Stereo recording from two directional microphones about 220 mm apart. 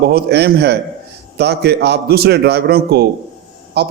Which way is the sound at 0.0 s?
45° right (ahead or behind).